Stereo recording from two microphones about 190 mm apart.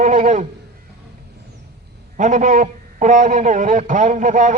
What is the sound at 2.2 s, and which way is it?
A man's voice, 40° right (ahead or behind).